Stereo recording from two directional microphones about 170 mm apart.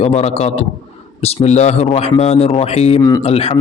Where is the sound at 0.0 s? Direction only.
35° left (ahead or behind).